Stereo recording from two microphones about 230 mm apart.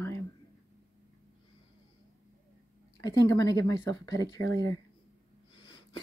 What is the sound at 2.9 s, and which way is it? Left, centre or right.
Speech, centre.